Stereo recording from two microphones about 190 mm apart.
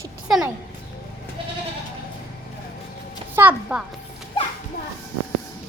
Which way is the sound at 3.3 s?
10° right (ahead or behind).